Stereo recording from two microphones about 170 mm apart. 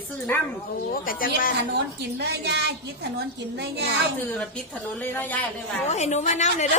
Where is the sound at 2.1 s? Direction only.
75° right (ahead or behind).